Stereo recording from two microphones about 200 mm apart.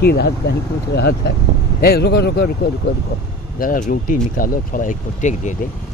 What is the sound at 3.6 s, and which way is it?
Speech, 40° left (ahead or behind).